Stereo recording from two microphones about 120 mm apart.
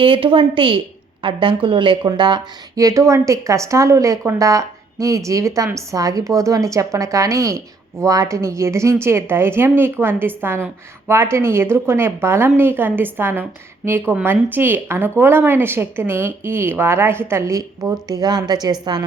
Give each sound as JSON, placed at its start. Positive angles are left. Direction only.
{"t": 0.0, "sound": "a woman's voice", "side_deg": -45}